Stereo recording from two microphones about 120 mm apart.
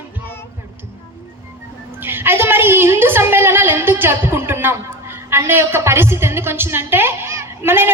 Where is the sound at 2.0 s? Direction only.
20° right (ahead or behind).